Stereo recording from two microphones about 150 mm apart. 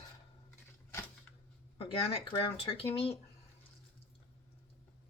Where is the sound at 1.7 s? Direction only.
35° left (ahead or behind).